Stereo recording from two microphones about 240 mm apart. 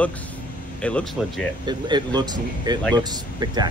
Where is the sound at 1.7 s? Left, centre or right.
Centre.